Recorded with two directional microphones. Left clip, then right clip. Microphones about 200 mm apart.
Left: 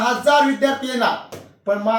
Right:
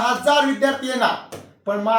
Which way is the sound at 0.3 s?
15° right (ahead or behind).